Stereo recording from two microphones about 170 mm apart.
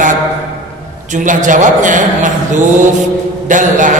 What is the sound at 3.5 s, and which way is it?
Speech, 50° right (ahead or behind).